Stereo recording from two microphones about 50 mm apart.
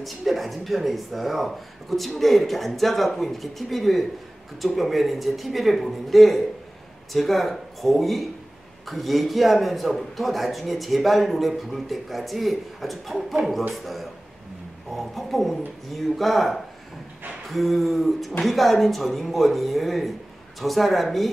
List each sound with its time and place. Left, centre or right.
0.0 s a man's voice: centre
14.9 s a man's voice: centre